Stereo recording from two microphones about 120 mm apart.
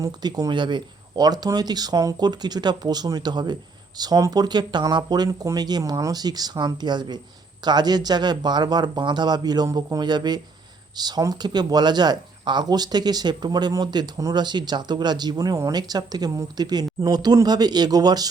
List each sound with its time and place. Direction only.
0.0 s speech: 35° right (ahead or behind)